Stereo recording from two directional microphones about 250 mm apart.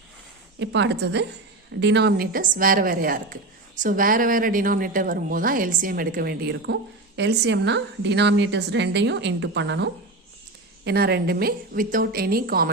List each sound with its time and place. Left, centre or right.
0.6 s a woman's voice: right